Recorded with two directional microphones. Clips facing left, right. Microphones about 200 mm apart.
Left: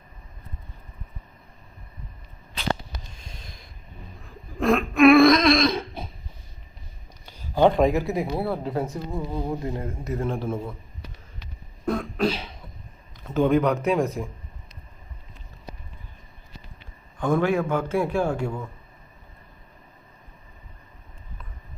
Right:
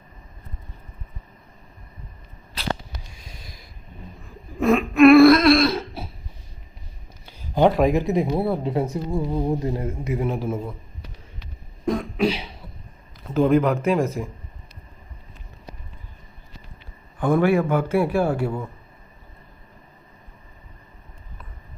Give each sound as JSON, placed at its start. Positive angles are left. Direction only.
{"t": 3.1, "sound": "snort", "side_deg": -5}
{"t": 4.5, "sound": "a sound", "side_deg": 0}
{"t": 7.3, "sound": "a sound", "side_deg": -10}
{"t": 7.7, "sound": "speech", "side_deg": -5}
{"t": 7.9, "sound": "speech", "side_deg": -20}
{"t": 9.0, "sound": "a man's voice", "side_deg": -15}
{"t": 9.5, "sound": "speech", "side_deg": -25}
{"t": 10.1, "sound": "a man's voice", "side_deg": -10}
{"t": 11.9, "sound": "cough", "side_deg": -10}
{"t": 13.2, "sound": "speech", "side_deg": 0}
{"t": 17.2, "sound": "a man's voice", "side_deg": -10}